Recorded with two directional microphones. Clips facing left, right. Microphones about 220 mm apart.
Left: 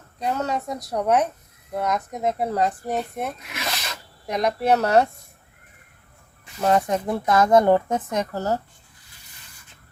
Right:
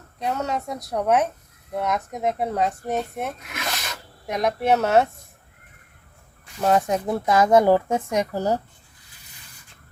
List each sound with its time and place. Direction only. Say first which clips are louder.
0.2 s a woman's voice: left 1 dB; centre (ahead or behind)
6.6 s speech: even; centre (ahead or behind)